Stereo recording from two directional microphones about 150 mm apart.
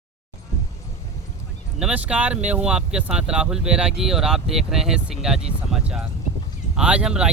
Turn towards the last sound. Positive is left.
turn(degrees=-5)  # may be behind; listen again after turning